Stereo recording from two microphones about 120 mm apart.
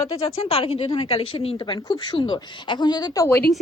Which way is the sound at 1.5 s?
35° left (ahead or behind).